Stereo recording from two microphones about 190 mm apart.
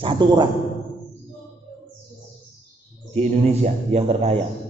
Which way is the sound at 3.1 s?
35° right (ahead or behind).